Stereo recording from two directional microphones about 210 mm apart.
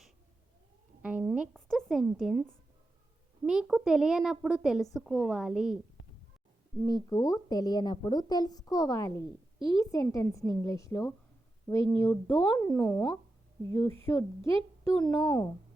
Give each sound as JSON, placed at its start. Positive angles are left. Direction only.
{"t": 1.0, "sound": "speech", "side_deg": -10}
{"t": 1.5, "sound": "a woman's voice", "side_deg": 0}
{"t": 6.8, "sound": "speech", "side_deg": 15}
{"t": 12.0, "sound": "a woman's voice", "side_deg": 5}
{"t": 13.7, "sound": "a woman's voice", "side_deg": 15}